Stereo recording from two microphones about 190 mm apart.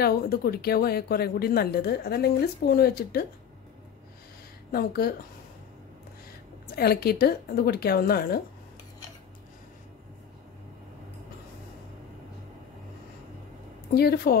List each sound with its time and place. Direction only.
0.0 s speech: 55° left (ahead or behind)
4.7 s speech: 55° left (ahead or behind)
6.7 s speech: 55° left (ahead or behind)
13.9 s speech: 55° left (ahead or behind)